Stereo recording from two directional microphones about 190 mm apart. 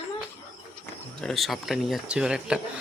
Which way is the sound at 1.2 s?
Centre (ahead or behind).